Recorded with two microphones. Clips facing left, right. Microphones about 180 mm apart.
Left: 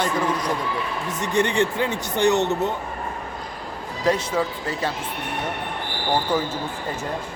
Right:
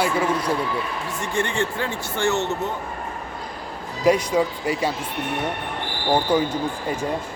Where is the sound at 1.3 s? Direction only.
20° left (ahead or behind).